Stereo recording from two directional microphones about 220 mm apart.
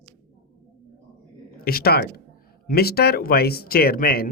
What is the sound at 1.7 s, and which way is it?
Speech, 45° left (ahead or behind).